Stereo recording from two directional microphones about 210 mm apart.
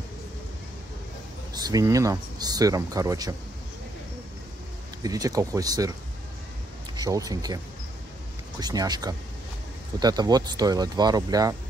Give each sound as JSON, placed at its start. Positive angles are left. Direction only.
{"t": 1.5, "sound": "speech", "side_deg": -15}
{"t": 5.0, "sound": "speech", "side_deg": -15}
{"t": 7.0, "sound": "speech", "side_deg": -15}